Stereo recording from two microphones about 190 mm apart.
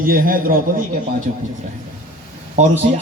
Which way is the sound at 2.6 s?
35° right (ahead or behind).